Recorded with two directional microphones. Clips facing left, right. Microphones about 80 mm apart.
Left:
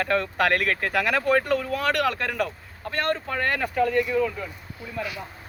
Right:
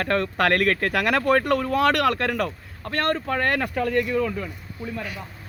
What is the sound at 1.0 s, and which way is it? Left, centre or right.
Speech, right.